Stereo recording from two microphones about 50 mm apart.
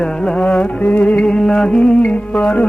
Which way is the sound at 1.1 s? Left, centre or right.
Centre.